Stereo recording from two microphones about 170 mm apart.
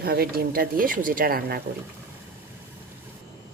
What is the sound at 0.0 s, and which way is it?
A woman's voice, 65° right (ahead or behind).